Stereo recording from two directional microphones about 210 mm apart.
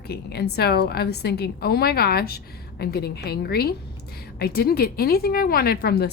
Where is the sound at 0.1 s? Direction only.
50° left (ahead or behind).